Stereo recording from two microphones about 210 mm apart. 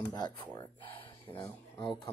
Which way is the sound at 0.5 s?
25° left (ahead or behind).